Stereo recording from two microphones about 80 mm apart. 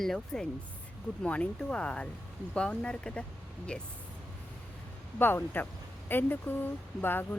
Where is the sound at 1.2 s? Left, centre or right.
Centre.